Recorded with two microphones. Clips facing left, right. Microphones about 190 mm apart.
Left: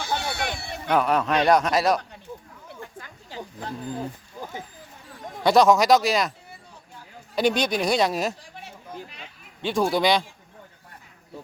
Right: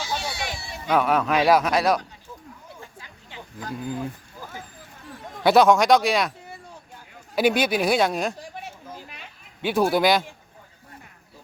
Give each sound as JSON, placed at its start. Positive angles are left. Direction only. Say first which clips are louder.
{"t": 0.0, "sound": "run", "louder": "left 2 dB", "side_deg": 55}
{"t": 0.9, "sound": "speech", "louder": "right 1 dB", "side_deg": 0}
{"t": 3.2, "sound": "livestock", "louder": "left 1 dB", "side_deg": 35}
{"t": 5.4, "sound": "speech", "louder": "right 1 dB", "side_deg": 0}
{"t": 7.3, "sound": "speech", "louder": "right 2 dB", "side_deg": -5}
{"t": 9.6, "sound": "speech", "louder": "right 2 dB", "side_deg": -5}